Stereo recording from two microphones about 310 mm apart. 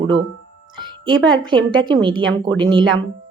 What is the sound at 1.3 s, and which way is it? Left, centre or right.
Speech, centre.